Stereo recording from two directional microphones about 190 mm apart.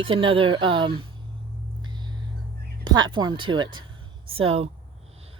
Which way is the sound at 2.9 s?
20° right (ahead or behind).